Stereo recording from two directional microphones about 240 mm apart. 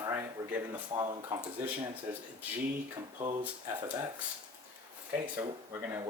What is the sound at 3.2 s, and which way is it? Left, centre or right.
Speech, right.